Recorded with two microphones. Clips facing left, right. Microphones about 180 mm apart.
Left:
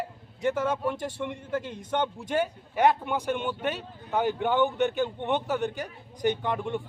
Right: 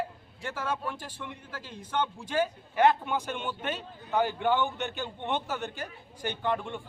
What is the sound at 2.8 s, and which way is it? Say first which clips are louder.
A man's voice: left 1 dB; 15° left (ahead or behind).